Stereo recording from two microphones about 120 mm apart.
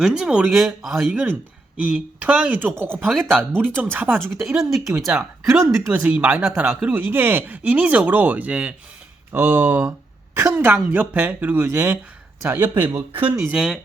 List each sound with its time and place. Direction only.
0.0 s speech: 5° right (ahead or behind)
1.7 s speech: 10° right (ahead or behind)
3.0 s speech: 5° left (ahead or behind)
3.6 s speech: 15° right (ahead or behind)
4.4 s speech: centre (ahead or behind)
4.9 s speech: 25° right (ahead or behind)
5.6 s speech: 15° right (ahead or behind)
9.3 s speech: 20° right (ahead or behind)
13.2 s speech: 5° right (ahead or behind)